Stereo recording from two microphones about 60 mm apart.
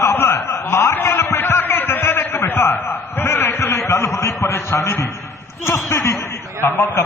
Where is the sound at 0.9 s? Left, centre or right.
Left.